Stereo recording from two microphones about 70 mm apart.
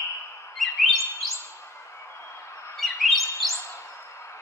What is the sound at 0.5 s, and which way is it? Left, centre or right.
Chirp, centre.